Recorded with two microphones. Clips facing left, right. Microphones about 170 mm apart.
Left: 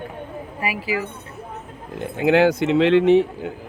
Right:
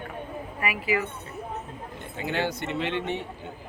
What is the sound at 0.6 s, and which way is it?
Speech, 30° left (ahead or behind).